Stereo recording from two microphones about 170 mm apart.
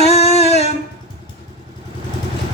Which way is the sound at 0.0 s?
40° left (ahead or behind).